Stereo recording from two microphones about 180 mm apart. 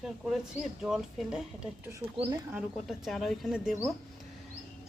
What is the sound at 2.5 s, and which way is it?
Speech, 5° right (ahead or behind).